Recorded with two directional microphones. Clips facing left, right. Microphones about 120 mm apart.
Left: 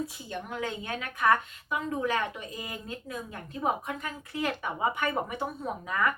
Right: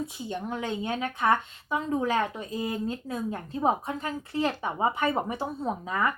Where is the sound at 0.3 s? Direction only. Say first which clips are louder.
Right 5 dB; 25° right (ahead or behind).